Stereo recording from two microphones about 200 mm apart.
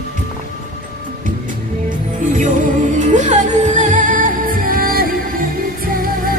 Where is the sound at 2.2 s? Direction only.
40° right (ahead or behind).